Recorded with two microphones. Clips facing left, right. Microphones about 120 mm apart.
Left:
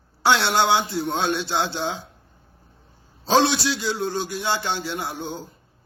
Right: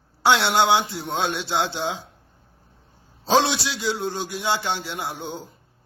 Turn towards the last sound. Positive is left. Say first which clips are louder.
# left 1 dB
turn(degrees=-15)  # may be behind; listen again after turning